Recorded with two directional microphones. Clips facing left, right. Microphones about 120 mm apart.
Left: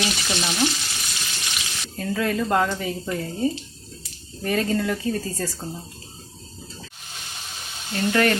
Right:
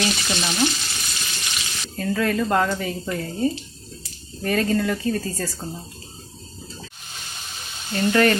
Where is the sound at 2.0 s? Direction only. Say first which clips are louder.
Right 2 dB; 15° left (ahead or behind).